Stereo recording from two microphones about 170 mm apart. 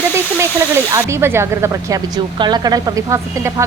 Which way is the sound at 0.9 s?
15° right (ahead or behind).